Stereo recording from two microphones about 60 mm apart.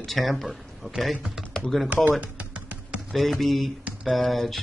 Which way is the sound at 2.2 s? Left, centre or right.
Right.